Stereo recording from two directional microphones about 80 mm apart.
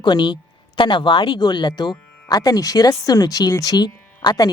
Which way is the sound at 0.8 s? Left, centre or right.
Left.